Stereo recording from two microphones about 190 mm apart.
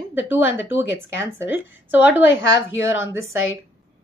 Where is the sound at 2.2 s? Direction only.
70° left (ahead or behind).